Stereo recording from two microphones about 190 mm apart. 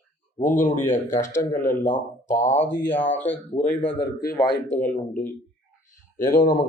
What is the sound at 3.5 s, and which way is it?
Speech, 40° left (ahead or behind).